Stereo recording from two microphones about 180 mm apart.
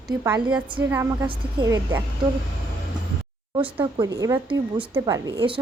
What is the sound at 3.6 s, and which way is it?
A woman's voice, 30° right (ahead or behind).